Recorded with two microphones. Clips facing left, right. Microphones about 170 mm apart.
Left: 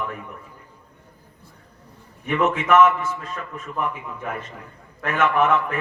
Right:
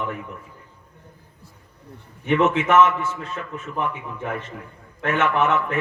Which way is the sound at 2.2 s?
30° right (ahead or behind).